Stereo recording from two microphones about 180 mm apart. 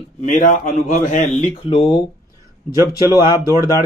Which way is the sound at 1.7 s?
30° left (ahead or behind).